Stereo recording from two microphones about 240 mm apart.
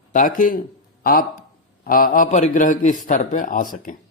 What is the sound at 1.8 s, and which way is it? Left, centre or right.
A man's voice, left.